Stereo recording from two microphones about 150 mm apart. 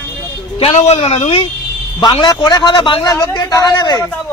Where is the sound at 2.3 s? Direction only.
30° left (ahead or behind).